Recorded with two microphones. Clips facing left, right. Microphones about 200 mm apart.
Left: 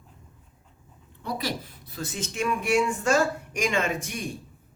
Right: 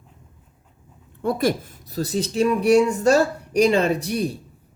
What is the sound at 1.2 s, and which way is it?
Speech, 50° right (ahead or behind).